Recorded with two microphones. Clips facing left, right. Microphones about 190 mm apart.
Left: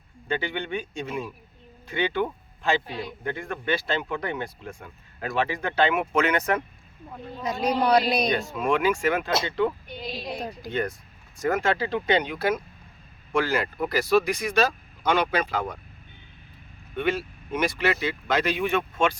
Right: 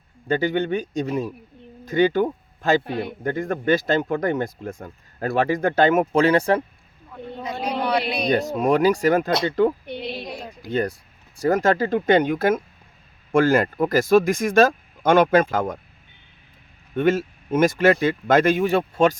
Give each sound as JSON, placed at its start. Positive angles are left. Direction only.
{"t": 0.3, "sound": "speech", "side_deg": -40}
{"t": 2.8, "sound": "a man's voice", "side_deg": -60}
{"t": 3.3, "sound": "speech", "side_deg": -40}
{"t": 8.3, "sound": "speech", "side_deg": -40}
{"t": 9.8, "sound": "a sound", "side_deg": -65}
{"t": 10.7, "sound": "speech", "side_deg": -35}
{"t": 16.9, "sound": "speech", "side_deg": -45}